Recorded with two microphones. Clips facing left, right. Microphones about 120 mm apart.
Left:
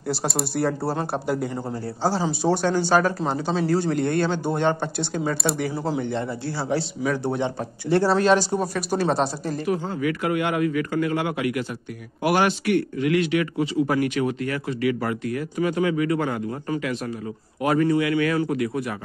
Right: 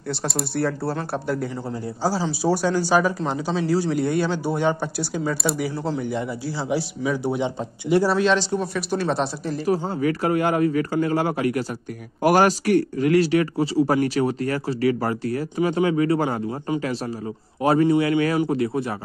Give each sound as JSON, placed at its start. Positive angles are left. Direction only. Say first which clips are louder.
{"t": 0.1, "sound": "speech", "louder": "left 1 dB", "side_deg": 0}
{"t": 2.4, "sound": "speech", "louder": "right 1 dB", "side_deg": -10}
{"t": 7.0, "sound": "speech", "louder": "even", "side_deg": 5}
{"t": 7.3, "sound": "speech", "louder": "right 1 dB", "side_deg": -15}
{"t": 8.3, "sound": "speech", "louder": "left 2 dB", "side_deg": 45}
{"t": 8.5, "sound": "speech", "louder": "left 1 dB", "side_deg": 5}
{"t": 9.7, "sound": "a man's voice", "louder": "right 3 dB", "side_deg": -35}
{"t": 16.4, "sound": "a man's voice", "louder": "right 2 dB", "side_deg": -20}
{"t": 16.8, "sound": "a man's voice", "louder": "right 1 dB", "side_deg": -35}